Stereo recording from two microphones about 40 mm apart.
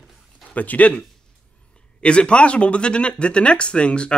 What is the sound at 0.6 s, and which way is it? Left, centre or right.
Speech, left.